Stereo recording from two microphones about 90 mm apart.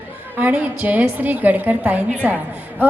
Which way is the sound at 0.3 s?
20° right (ahead or behind).